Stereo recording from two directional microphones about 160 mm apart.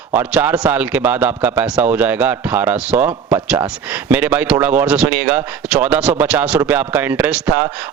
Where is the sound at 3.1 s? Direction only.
30° right (ahead or behind).